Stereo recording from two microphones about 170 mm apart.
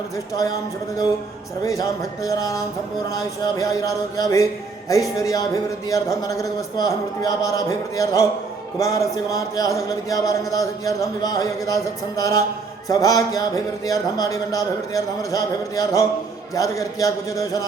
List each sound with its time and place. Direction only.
1.6 s speech: 20° left (ahead or behind)